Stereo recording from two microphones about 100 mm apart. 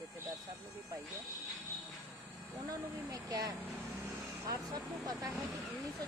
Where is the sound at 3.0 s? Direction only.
40° right (ahead or behind).